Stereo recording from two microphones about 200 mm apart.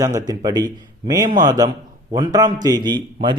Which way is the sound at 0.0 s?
15° right (ahead or behind).